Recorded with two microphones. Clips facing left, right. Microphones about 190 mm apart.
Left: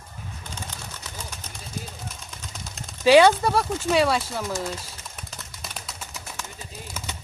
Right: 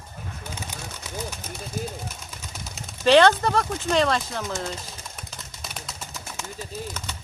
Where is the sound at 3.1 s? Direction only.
10° left (ahead or behind).